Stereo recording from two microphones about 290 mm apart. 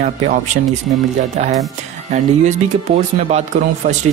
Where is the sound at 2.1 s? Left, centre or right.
Right.